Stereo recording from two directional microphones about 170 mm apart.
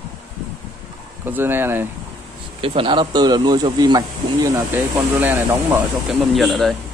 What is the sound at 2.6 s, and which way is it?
Speech, 30° right (ahead or behind).